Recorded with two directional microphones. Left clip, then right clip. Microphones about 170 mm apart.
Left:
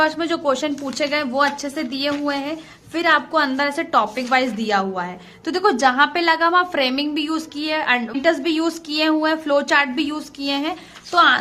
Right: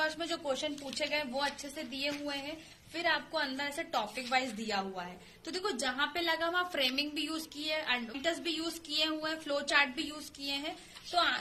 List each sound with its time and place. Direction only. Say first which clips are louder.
0.0 s a woman's voice: left 15 dB; 45° left (ahead or behind)